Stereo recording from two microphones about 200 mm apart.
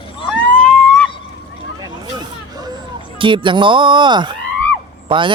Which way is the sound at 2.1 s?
20° right (ahead or behind).